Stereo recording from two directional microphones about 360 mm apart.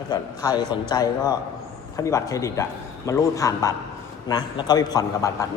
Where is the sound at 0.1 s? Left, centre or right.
Centre.